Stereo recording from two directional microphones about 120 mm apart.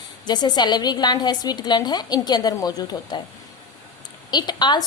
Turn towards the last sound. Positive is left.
turn(degrees=35)  # may be behind; listen again after turning